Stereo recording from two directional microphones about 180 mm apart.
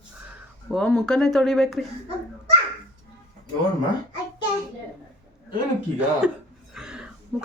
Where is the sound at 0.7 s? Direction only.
5° left (ahead or behind).